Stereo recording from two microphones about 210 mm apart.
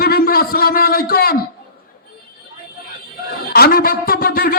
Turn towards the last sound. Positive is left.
turn(degrees=45)  # may be behind; listen again after turning